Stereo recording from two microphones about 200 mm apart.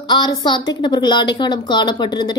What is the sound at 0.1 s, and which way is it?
A woman's voice, 20° left (ahead or behind).